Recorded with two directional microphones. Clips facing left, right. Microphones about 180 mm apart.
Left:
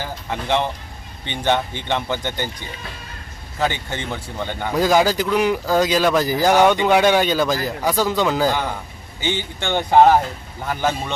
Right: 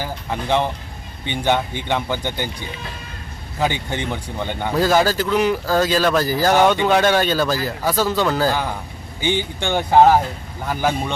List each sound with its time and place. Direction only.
0.0 s speech: 10° right (ahead or behind)
3.6 s speech: 15° right (ahead or behind)
4.8 s speech: 15° left (ahead or behind)
9.2 s speech: 15° right (ahead or behind)